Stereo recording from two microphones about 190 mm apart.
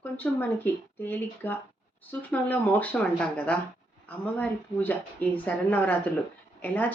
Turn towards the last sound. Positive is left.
turn(degrees=10)  # may be behind; listen again after turning